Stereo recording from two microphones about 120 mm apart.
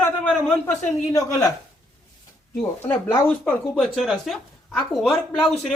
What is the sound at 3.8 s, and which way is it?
Speech, centre (ahead or behind).